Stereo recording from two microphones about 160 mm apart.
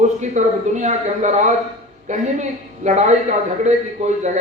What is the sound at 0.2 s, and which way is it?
A man's voice, 45° right (ahead or behind).